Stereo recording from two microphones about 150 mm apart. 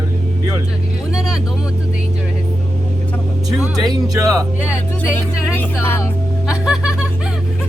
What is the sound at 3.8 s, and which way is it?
Speech, 25° right (ahead or behind).